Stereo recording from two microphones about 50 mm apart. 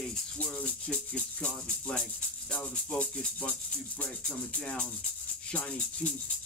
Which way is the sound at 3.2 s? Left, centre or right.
Left.